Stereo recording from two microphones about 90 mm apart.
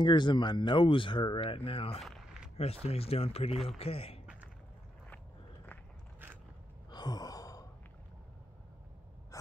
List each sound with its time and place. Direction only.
0.0 s speech: 60° left (ahead or behind); by 2.0 s 90° left
3.0 s a man's voice: 90° left
6.9 s sigh: 50° left (ahead or behind)
9.3 s owl: 40° left (ahead or behind)